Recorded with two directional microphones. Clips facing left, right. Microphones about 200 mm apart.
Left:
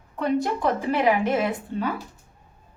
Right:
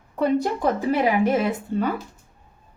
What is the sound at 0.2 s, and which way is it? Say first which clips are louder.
A woman's voice: right 2 dB; 40° right (ahead or behind).